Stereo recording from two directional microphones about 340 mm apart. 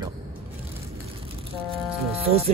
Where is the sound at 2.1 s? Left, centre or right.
Centre.